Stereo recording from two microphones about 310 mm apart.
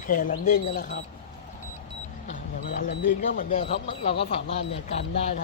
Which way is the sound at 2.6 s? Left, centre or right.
Left.